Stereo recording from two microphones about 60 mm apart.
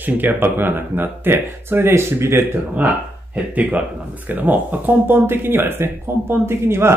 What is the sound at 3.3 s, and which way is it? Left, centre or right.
Speech, right.